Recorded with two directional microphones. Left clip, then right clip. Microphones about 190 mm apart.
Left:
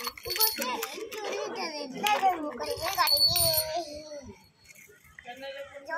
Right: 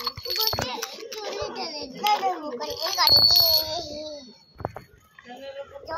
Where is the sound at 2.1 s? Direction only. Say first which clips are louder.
Right 1 dB; 20° left (ahead or behind).